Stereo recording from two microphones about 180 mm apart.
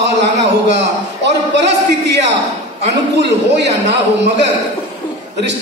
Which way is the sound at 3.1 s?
70° right (ahead or behind).